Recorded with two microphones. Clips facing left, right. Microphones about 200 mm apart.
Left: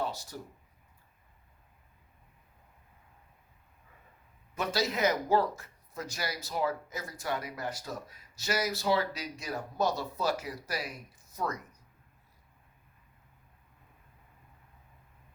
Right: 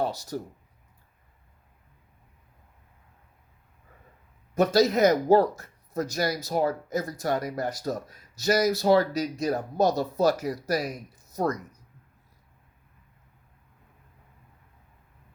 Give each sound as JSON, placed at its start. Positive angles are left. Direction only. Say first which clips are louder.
{"t": 0.0, "sound": "speech", "louder": "right 6 dB", "side_deg": -40}
{"t": 4.5, "sound": "speech", "louder": "right 11 dB", "side_deg": -40}